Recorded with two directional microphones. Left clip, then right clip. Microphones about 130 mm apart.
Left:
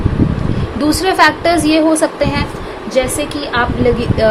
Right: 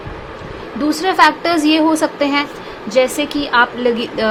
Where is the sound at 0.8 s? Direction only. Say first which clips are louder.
Left 2 dB; 15° right (ahead or behind).